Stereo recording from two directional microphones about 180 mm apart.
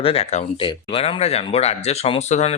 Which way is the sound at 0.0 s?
35° left (ahead or behind).